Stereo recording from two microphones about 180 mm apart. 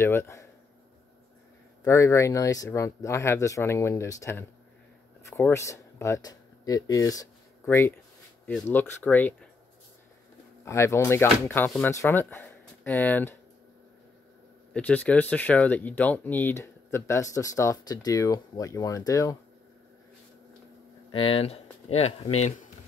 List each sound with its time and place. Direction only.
0.0 s speech: 15° left (ahead or behind)
1.9 s speech: 15° left (ahead or behind)
10.6 s speech: 15° left (ahead or behind)
14.7 s speech: 5° left (ahead or behind)
21.1 s speech: 30° left (ahead or behind)